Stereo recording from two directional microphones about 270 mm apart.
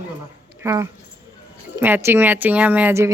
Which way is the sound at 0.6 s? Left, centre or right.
Centre.